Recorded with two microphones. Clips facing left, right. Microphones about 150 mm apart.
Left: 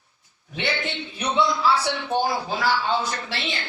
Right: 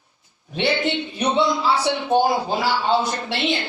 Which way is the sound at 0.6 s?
25° right (ahead or behind).